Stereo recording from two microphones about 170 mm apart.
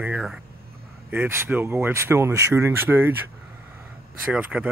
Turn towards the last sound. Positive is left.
turn(degrees=-10)  # may be behind; listen again after turning